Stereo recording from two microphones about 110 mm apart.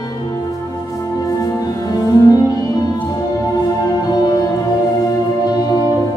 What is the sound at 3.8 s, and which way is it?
Music, 35° left (ahead or behind).